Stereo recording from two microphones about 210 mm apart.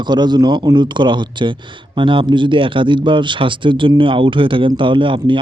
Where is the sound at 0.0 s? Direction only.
20° right (ahead or behind).